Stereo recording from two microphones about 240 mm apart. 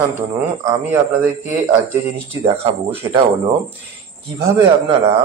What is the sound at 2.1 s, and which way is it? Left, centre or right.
Speech, right.